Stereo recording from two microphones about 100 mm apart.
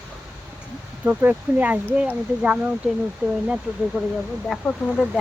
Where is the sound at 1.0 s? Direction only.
15° right (ahead or behind).